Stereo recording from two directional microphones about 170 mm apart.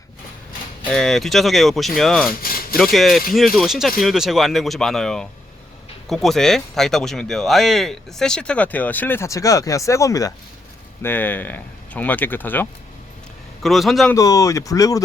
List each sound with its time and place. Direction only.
0.9 s speech: 5° left (ahead or behind)
2.4 s a sound: 60° left (ahead or behind)
2.7 s speech: centre (ahead or behind)
13.6 s speech: centre (ahead or behind)
14.1 s speech: 20° left (ahead or behind)